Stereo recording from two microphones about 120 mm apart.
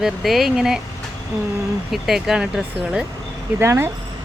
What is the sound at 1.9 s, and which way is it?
Speech, 5° right (ahead or behind).